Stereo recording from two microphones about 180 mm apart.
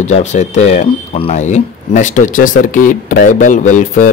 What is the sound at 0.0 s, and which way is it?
Speech, 40° left (ahead or behind).